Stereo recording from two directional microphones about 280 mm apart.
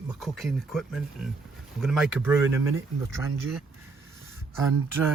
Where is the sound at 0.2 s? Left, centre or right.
Centre.